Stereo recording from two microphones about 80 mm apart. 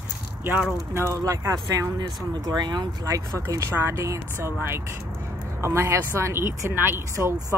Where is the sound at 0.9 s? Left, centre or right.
Right.